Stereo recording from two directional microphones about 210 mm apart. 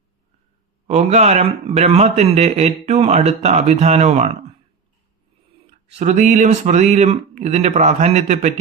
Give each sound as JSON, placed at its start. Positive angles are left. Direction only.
{"t": 0.9, "sound": "a man's voice", "side_deg": -30}
{"t": 5.9, "sound": "a man's voice", "side_deg": -35}